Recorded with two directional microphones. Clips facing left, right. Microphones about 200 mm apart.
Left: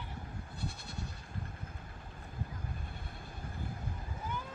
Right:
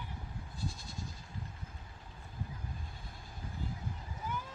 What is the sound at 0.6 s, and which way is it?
Goat, 65° left (ahead or behind).